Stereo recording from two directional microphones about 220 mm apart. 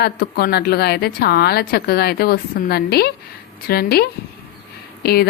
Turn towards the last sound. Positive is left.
turn(degrees=45)  # may be behind; listen again after turning